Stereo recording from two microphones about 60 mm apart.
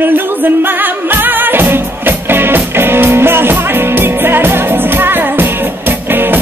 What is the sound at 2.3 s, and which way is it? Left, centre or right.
Music, right.